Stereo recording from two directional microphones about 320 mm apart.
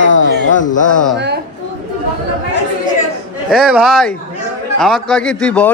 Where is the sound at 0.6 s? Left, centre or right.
Left.